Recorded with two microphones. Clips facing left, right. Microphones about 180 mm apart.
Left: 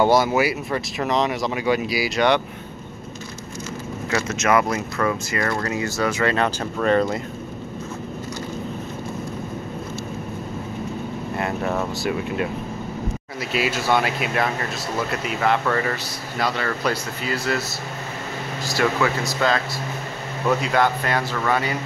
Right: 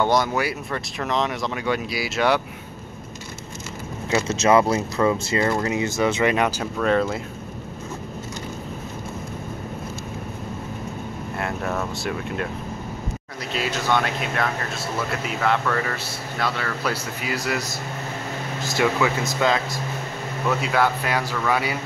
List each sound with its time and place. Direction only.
0.0 s speech: 5° left (ahead or behind)
4.1 s speech: 25° right (ahead or behind); by 6.7 s 10° right (ahead or behind)
6.8 s speech: centre (ahead or behind)
11.3 s speech: centre (ahead or behind)
13.5 s speech: 10° left (ahead or behind)
18.6 s air conditioning: 20° right (ahead or behind)
19.2 s speech: 15° right (ahead or behind)
20.6 s speech: 5° right (ahead or behind)